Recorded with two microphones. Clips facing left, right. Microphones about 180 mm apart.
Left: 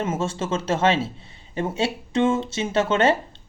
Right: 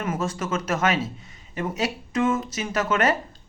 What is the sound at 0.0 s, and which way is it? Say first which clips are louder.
Speech: left 2 dB; 25° left (ahead or behind).